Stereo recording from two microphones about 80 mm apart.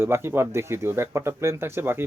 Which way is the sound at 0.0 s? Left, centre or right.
Right.